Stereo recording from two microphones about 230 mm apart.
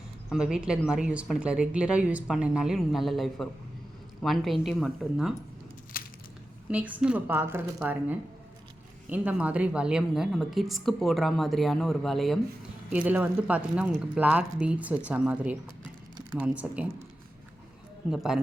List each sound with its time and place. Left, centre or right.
0.3 s a woman's voice: centre
6.0 s a sound: left
6.7 s a woman's voice: centre
18.1 s a woman's voice: centre